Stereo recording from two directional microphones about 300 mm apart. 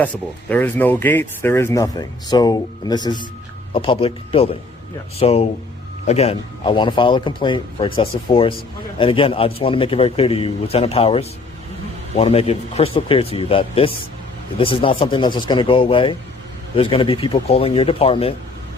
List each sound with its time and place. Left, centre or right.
0.0 s a man's voice: centre